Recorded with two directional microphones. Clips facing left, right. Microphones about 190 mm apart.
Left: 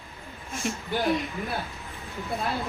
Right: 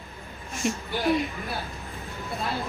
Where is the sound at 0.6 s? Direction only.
Centre (ahead or behind).